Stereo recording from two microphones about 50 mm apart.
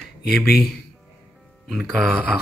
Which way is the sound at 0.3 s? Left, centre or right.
Centre.